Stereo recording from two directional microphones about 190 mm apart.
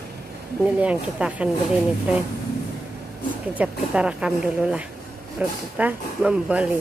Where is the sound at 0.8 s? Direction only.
5° right (ahead or behind).